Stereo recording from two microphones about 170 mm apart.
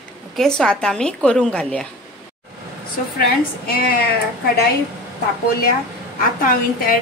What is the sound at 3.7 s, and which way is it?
Speech, 65° left (ahead or behind).